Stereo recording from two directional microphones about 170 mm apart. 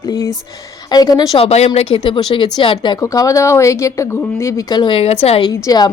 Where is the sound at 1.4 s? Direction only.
35° left (ahead or behind).